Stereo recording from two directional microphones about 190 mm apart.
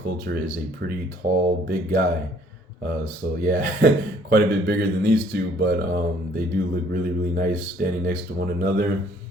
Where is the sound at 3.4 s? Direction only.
50° right (ahead or behind).